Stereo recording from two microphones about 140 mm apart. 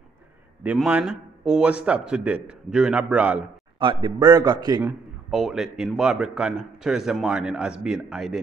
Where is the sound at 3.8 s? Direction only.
35° right (ahead or behind).